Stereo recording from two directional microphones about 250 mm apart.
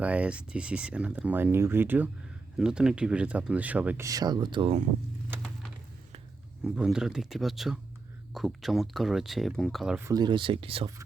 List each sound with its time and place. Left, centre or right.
0.0 s speech: centre
6.7 s speech: centre
10.1 s speech: centre